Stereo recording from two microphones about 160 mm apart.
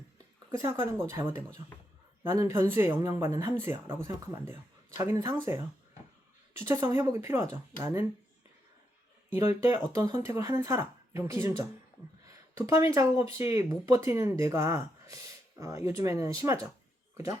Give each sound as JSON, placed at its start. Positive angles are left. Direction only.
{"t": 0.5, "sound": "speech", "side_deg": -20}
{"t": 2.2, "sound": "speech", "side_deg": -20}
{"t": 6.7, "sound": "speech", "side_deg": -15}
{"t": 9.3, "sound": "speech", "side_deg": -15}